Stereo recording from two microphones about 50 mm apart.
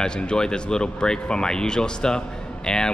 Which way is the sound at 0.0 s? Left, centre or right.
Centre.